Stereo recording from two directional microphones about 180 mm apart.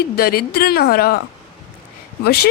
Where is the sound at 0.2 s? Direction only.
60° left (ahead or behind).